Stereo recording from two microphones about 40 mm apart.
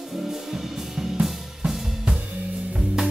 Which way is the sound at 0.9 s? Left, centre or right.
Centre.